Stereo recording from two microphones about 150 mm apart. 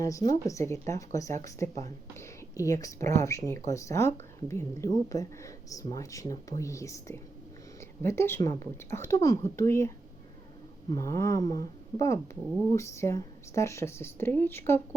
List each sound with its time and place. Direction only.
0.0 s a woman's voice: 20° left (ahead or behind)
10.9 s a woman's voice: 20° left (ahead or behind)